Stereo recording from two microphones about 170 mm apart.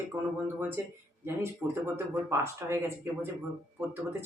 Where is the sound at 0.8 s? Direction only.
15° right (ahead or behind).